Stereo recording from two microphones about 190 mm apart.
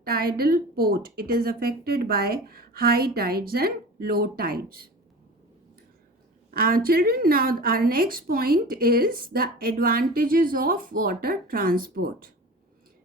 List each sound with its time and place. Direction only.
0.0 s a woman's voice: 50° right (ahead or behind)
6.5 s a woman's voice: 50° right (ahead or behind)